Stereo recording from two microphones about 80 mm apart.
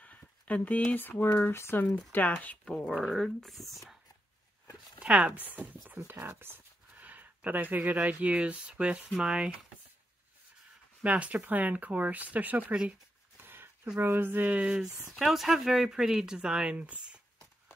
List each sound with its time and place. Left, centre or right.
0.0 s speech: centre
2.1 s speech: centre
3.0 s speech: centre
5.0 s speech: centre
11.0 s speech: centre
13.4 s a sound: right
13.9 s speech: right